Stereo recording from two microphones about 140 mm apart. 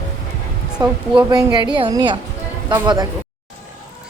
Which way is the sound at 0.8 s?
30° right (ahead or behind).